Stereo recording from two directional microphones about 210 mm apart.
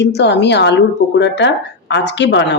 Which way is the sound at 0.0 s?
55° left (ahead or behind).